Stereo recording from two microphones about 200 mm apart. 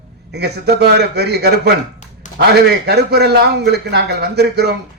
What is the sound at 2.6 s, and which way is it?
A man's voice, 55° right (ahead or behind).